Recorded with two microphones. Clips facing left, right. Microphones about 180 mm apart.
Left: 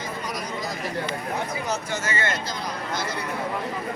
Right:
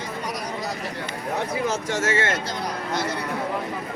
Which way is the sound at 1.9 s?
90° right.